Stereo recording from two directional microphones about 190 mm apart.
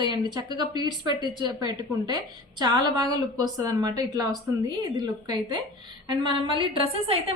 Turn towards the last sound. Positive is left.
turn(degrees=-30)  # may be behind; listen again after turning